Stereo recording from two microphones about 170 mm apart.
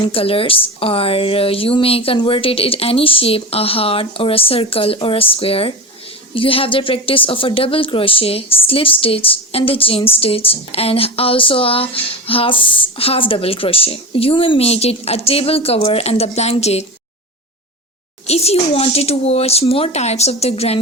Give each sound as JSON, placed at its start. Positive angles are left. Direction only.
{"t": 0.0, "sound": "a woman's voice", "side_deg": 35}
{"t": 18.3, "sound": "a woman's voice", "side_deg": 40}